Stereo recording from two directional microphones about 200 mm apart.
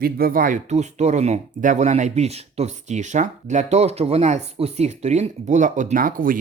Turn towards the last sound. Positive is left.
turn(degrees=-45)  # may be behind; listen again after turning